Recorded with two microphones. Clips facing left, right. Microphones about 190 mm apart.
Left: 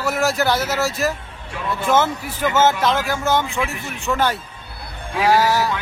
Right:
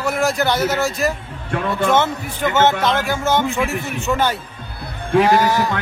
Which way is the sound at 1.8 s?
Centre (ahead or behind).